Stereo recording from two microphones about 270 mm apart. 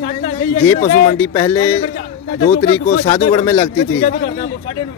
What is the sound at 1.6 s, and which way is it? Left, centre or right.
Speech, left.